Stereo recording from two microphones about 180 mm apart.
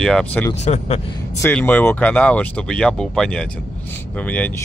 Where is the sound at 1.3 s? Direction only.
10° left (ahead or behind).